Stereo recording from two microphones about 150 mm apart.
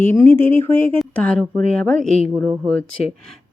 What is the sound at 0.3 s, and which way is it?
A woman's voice, 15° left (ahead or behind).